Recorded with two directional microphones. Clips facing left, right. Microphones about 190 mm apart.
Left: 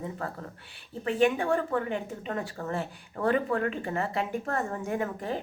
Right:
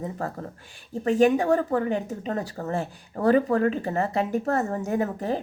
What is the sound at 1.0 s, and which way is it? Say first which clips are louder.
A woman's voice: right 5 dB; 40° right (ahead or behind).